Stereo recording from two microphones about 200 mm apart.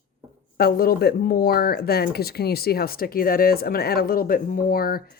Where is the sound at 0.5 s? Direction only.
50° left (ahead or behind).